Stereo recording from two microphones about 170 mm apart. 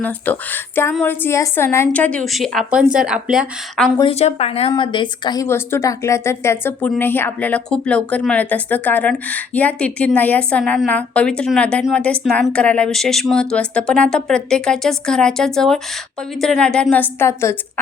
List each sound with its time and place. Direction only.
0.0 s a woman's voice: 10° left (ahead or behind)
4.0 s a woman's voice: 40° left (ahead or behind); by 17.6 s 15° left (ahead or behind)